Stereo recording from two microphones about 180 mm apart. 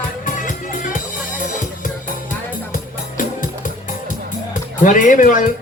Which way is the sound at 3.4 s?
45° left (ahead or behind).